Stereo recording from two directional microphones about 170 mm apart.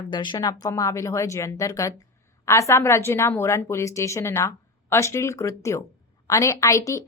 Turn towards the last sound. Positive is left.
turn(degrees=15)  # may be behind; listen again after turning